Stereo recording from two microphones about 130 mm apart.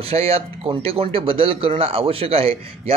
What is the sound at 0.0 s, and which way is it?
Speech, 50° right (ahead or behind).